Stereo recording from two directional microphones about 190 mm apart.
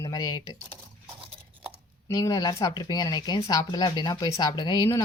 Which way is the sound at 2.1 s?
20° left (ahead or behind).